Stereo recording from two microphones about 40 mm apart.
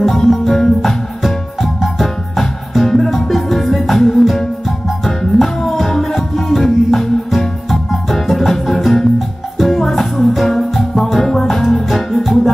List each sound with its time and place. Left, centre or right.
0.0 s music: centre